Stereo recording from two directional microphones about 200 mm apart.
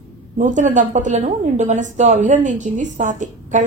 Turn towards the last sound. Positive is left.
turn(degrees=-40)  # may be behind; listen again after turning